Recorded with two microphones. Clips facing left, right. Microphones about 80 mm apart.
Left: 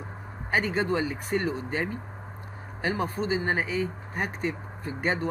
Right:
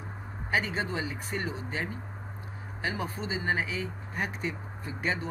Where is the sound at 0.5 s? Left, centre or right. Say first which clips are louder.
Left 4 dB; left.